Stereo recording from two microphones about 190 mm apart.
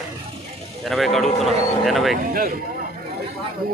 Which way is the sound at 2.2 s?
50° right (ahead or behind).